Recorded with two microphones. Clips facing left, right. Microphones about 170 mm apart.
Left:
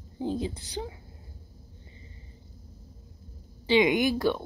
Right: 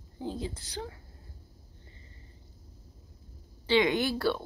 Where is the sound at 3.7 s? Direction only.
15° left (ahead or behind).